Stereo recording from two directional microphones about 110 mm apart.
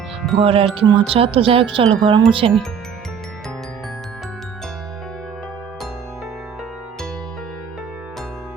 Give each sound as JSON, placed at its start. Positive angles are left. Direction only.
{"t": 0.3, "sound": "wind chime", "side_deg": -60}
{"t": 2.4, "sound": "wind chime", "side_deg": -65}